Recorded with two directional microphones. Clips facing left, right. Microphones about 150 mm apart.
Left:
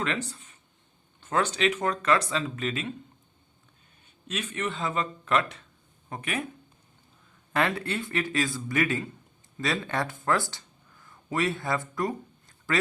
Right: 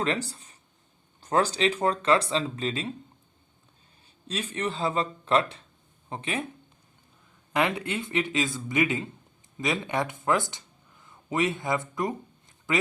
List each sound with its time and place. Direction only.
0.0 s speech: 35° right (ahead or behind)
4.0 s speech: 35° right (ahead or behind)
7.5 s speech: 15° right (ahead or behind)